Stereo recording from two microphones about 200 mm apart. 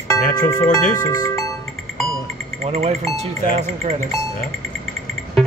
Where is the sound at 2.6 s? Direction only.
30° right (ahead or behind).